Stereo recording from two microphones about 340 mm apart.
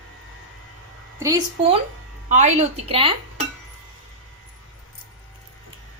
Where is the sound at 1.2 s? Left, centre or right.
Centre.